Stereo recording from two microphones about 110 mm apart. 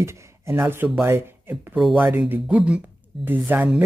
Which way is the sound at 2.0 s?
15° right (ahead or behind).